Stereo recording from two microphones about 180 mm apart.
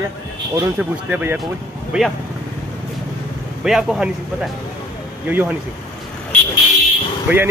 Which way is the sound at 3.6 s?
Centre (ahead or behind).